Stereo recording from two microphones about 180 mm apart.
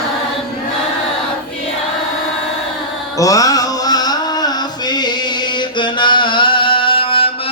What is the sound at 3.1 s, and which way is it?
Music, 20° left (ahead or behind).